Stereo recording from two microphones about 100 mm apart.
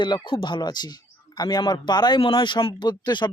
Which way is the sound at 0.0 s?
50° left (ahead or behind).